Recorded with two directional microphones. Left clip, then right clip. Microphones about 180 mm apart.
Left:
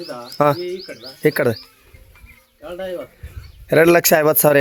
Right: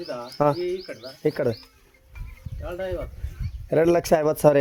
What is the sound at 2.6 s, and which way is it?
Speech, 55° left (ahead or behind).